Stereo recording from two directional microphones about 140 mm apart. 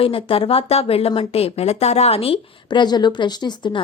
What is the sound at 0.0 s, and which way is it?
Speech, 40° left (ahead or behind).